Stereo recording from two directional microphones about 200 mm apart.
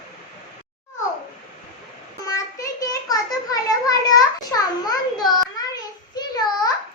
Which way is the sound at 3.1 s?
20° left (ahead or behind).